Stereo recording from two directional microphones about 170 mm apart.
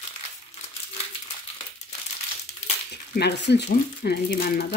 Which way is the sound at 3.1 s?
75° left (ahead or behind).